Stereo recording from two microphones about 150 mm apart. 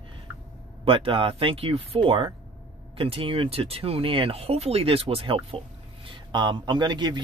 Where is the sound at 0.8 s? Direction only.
35° right (ahead or behind).